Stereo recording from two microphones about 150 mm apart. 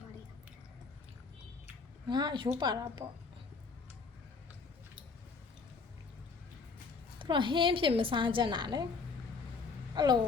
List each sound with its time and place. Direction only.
2.0 s a woman's voice: 30° right (ahead or behind)
7.2 s a woman's voice: 35° right (ahead or behind)
9.9 s speech: 30° right (ahead or behind)